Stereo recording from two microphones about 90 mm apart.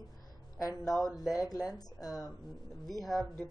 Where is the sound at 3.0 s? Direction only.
Centre (ahead or behind).